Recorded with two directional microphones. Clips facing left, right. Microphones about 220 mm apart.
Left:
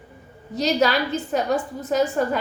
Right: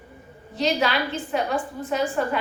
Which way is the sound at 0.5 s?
40° left (ahead or behind).